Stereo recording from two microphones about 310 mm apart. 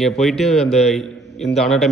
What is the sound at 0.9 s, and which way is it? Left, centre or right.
A man's voice, centre.